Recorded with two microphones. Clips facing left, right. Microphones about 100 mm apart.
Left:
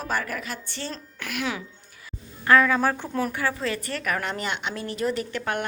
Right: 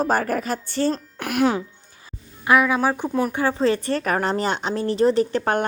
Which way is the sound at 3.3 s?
25° right (ahead or behind).